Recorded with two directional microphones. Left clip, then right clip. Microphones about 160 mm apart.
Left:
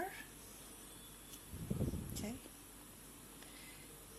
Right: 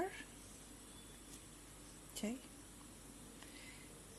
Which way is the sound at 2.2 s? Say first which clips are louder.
Right 5 dB; 40° right (ahead or behind).